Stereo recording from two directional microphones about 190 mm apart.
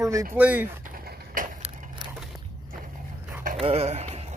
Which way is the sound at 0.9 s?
45° right (ahead or behind).